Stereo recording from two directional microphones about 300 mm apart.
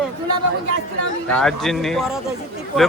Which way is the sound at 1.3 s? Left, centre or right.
Centre.